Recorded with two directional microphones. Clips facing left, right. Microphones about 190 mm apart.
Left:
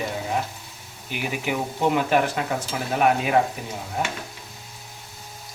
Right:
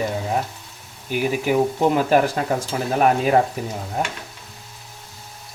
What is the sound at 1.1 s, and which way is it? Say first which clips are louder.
Speech: right 7 dB; 45° right (ahead or behind).